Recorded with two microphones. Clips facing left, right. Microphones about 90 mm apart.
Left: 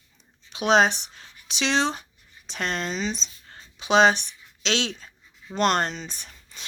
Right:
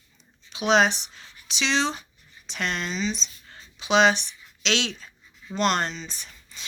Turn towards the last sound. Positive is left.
turn(degrees=50)  # may be behind; listen again after turning